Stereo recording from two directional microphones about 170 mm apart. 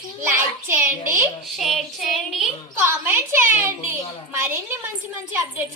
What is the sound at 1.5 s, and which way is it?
Child singing, centre (ahead or behind).